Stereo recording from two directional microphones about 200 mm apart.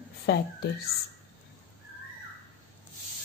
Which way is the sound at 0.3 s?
55° left (ahead or behind).